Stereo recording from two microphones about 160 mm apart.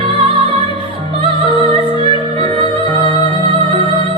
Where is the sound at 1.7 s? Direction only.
35° right (ahead or behind).